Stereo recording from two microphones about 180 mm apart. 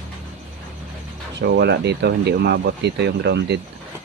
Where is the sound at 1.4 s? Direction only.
65° right (ahead or behind).